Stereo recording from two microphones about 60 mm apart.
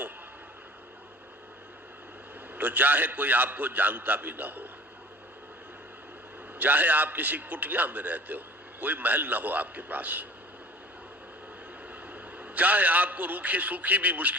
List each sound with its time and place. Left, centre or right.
2.6 s a man's voice: right
6.6 s a man's voice: right
12.1 s a man's voice: right